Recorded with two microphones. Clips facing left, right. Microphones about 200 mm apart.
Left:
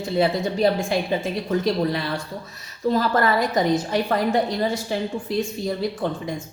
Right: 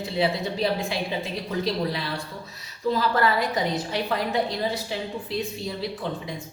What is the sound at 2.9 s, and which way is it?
A woman's voice, 45° left (ahead or behind).